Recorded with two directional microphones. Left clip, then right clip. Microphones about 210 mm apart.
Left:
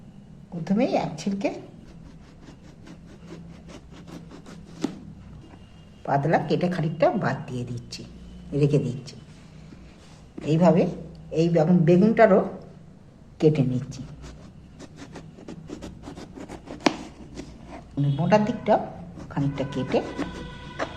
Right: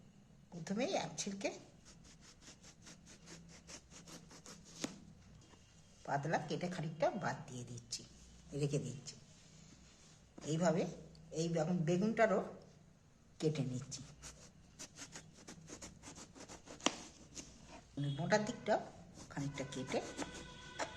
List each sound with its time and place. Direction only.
0.6 s a woman's voice: 10° right (ahead or behind)
4.8 s a sound: 25° right (ahead or behind)
6.0 s speech: 10° left (ahead or behind)
10.4 s speech: 5° left (ahead or behind)
13.4 s speech: 5° left (ahead or behind)
13.7 s writing: 15° right (ahead or behind)
14.8 s vehicle: 20° right (ahead or behind)
17.4 s a sound: 10° right (ahead or behind)
18.0 s a woman's voice: 10° right (ahead or behind)